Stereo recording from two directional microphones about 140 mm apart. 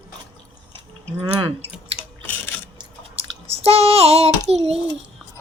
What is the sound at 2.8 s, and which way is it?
Chewing, 45° right (ahead or behind).